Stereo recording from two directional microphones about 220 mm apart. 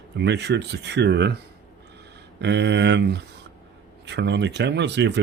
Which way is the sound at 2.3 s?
50° right (ahead or behind).